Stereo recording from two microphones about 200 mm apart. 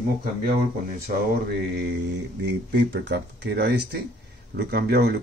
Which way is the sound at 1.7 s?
55° right (ahead or behind).